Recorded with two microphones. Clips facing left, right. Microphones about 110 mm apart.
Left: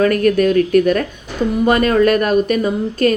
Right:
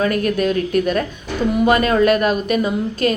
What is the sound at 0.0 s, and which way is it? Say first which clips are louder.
A woman's voice: left 5 dB; 50° left (ahead or behind).